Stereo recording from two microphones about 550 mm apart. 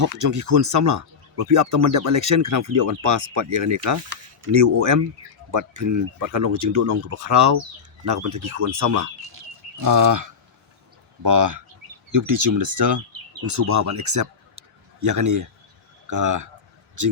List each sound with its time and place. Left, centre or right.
0.0 s speech: right